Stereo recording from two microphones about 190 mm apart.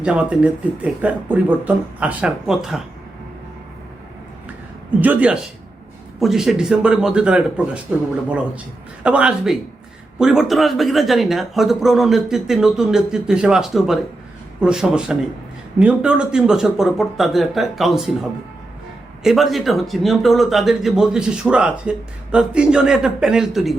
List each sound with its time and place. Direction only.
0.0 s speech: 5° right (ahead or behind)
4.4 s a sound: 10° right (ahead or behind)
6.1 s speech: centre (ahead or behind)
9.0 s speech: 5° right (ahead or behind)